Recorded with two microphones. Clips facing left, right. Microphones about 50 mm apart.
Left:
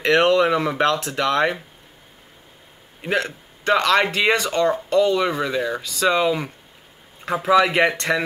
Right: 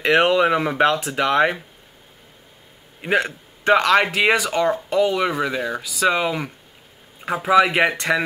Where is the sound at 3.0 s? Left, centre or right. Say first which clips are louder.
Right 2 dB; centre.